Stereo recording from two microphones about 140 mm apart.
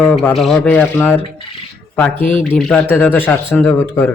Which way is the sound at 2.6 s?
5° left (ahead or behind).